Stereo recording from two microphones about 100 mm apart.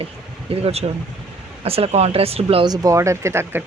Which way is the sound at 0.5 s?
85° right.